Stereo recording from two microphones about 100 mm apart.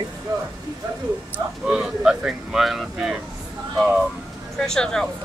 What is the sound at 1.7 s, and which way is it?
Speech, 5° right (ahead or behind).